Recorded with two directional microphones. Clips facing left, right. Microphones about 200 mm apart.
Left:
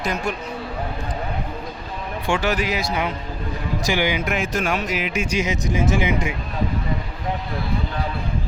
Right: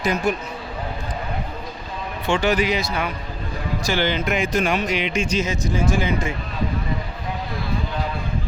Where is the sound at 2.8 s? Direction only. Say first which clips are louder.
Left 1 dB; 15° left (ahead or behind).